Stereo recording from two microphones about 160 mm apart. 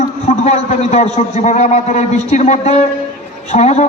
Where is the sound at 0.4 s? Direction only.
40° left (ahead or behind).